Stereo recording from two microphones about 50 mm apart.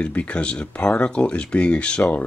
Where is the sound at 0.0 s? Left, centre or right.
Left.